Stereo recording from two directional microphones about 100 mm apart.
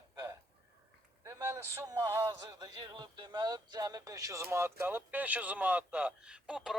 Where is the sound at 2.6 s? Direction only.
45° right (ahead or behind).